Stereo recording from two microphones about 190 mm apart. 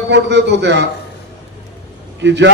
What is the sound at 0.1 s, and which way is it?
Speech, 65° right (ahead or behind).